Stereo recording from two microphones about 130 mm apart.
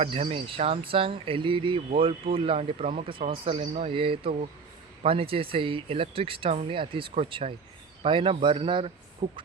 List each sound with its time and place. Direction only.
0.0 s speech: 50° right (ahead or behind)